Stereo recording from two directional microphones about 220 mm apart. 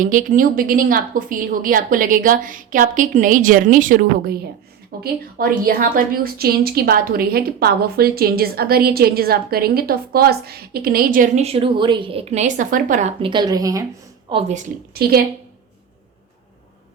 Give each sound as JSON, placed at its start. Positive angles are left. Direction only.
{"t": 0.0, "sound": "a woman's voice", "side_deg": -35}
{"t": 14.3, "sound": "a woman's voice", "side_deg": -25}